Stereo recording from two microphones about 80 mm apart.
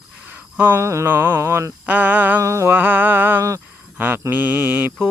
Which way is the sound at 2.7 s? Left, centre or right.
Right.